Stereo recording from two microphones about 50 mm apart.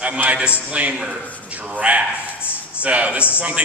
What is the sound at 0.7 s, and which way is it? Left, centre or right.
Speech, right.